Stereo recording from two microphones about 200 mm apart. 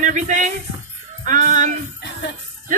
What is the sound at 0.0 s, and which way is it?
A woman's voice, 40° right (ahead or behind).